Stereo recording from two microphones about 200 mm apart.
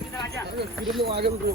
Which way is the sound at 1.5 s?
50° right (ahead or behind).